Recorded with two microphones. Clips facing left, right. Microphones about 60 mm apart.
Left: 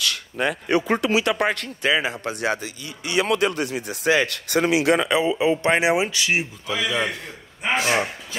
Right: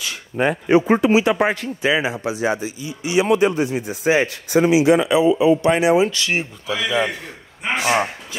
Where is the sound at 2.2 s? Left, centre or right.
Left.